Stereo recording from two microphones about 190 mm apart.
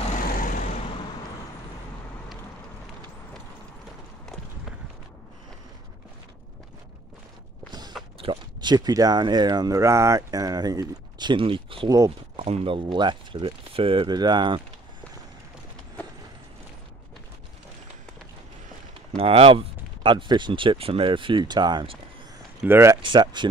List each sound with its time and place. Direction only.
0.0 s vehicle: 45° left (ahead or behind)
8.2 s speech: 25° right (ahead or behind)
12.4 s speech: 35° right (ahead or behind)
19.1 s speech: 30° right (ahead or behind)
22.6 s speech: 10° right (ahead or behind)
23.0 s speech: 25° right (ahead or behind)